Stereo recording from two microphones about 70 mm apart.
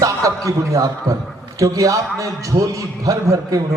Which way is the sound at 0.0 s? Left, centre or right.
Right.